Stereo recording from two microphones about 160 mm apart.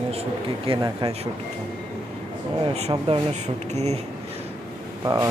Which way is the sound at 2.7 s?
40° right (ahead or behind).